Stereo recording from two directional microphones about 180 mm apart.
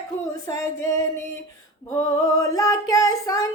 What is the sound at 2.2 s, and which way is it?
Female singing, 20° left (ahead or behind).